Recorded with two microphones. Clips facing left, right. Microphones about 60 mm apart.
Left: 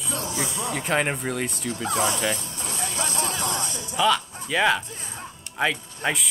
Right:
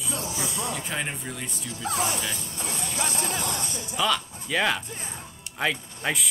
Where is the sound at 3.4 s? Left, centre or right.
Left.